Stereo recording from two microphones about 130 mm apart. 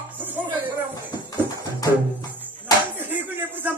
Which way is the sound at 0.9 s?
30° left (ahead or behind).